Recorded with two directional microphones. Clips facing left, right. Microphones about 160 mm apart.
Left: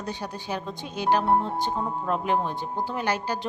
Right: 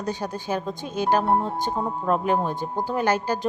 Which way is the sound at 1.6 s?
45° right (ahead or behind).